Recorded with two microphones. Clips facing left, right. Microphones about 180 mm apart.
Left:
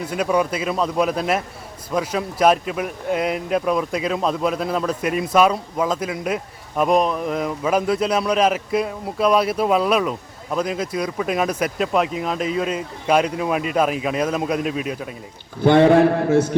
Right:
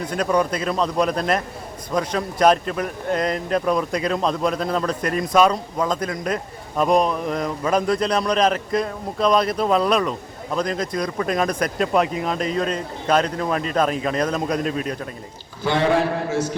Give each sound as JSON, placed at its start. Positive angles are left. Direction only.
{"t": 0.0, "sound": "speech", "side_deg": 5}
{"t": 15.6, "sound": "a man's voice", "side_deg": 55}